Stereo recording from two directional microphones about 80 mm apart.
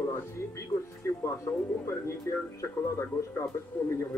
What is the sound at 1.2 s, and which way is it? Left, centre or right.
Speech, left.